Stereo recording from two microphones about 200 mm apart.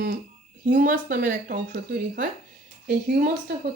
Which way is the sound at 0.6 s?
45° right (ahead or behind).